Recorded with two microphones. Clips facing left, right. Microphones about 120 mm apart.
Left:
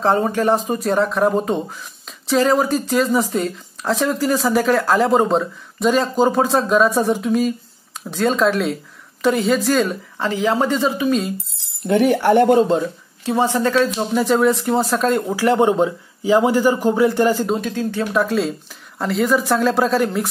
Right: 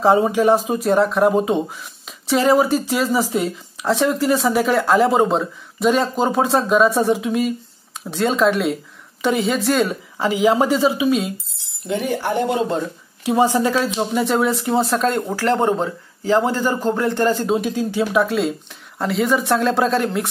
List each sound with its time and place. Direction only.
0.0 s speech: 10° right (ahead or behind)
11.9 s speech: 65° left (ahead or behind)
13.2 s speech: 15° right (ahead or behind)
15.4 s a man's voice: 15° left (ahead or behind)
17.6 s speech: 10° right (ahead or behind)
18.1 s speech: centre (ahead or behind)